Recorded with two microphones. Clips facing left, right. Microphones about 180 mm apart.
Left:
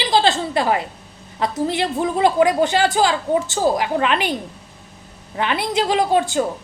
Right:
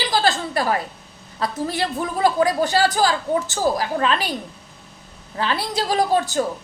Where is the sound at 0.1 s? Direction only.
25° left (ahead or behind).